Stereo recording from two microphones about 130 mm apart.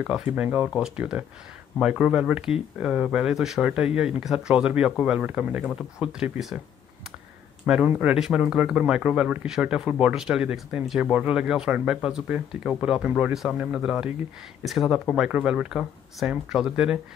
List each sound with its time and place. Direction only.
0.0 s speech: 5° right (ahead or behind)
7.6 s speech: 10° right (ahead or behind)